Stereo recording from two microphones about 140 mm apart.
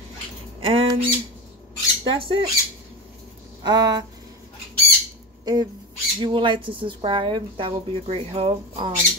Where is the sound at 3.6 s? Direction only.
30° right (ahead or behind).